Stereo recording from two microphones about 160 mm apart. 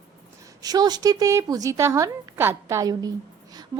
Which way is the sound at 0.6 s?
25° right (ahead or behind).